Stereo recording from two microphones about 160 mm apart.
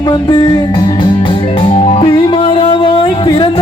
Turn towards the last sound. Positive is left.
turn(degrees=30)  # may be behind; listen again after turning